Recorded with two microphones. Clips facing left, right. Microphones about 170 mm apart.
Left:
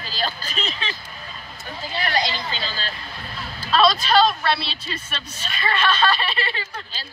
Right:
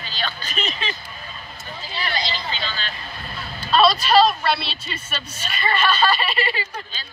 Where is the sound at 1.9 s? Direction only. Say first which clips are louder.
Left 3 dB; 50° left (ahead or behind).